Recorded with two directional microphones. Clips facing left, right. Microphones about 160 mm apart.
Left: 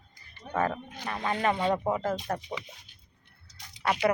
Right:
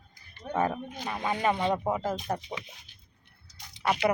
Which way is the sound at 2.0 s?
15° right (ahead or behind).